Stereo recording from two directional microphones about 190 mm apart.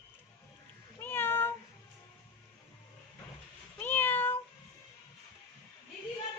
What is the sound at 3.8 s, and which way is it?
Meow, 10° left (ahead or behind).